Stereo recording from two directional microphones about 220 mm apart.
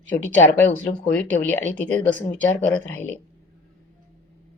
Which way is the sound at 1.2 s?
10° left (ahead or behind).